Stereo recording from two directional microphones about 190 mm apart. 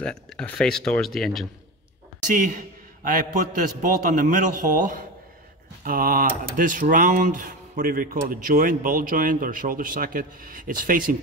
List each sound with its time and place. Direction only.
0.0 s speech: 5° left (ahead or behind)
2.2 s speech: 45° right (ahead or behind)